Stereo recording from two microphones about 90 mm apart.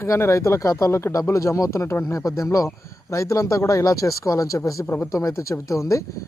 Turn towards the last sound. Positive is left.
turn(degrees=35)  # may be behind; listen again after turning